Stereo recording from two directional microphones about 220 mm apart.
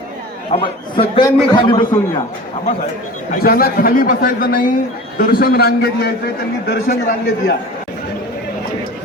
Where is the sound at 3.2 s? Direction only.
40° left (ahead or behind).